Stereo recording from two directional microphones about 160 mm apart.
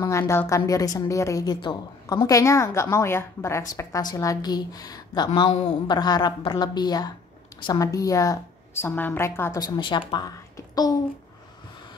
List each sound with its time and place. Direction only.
0.0 s a woman's voice: 15° left (ahead or behind)
5.5 s a man's voice: 45° left (ahead or behind)
5.9 s a woman's voice: 25° left (ahead or behind)
9.8 s a woman's voice: 30° left (ahead or behind)